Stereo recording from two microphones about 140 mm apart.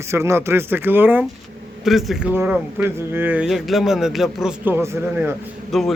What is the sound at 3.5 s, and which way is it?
A man's voice, centre (ahead or behind).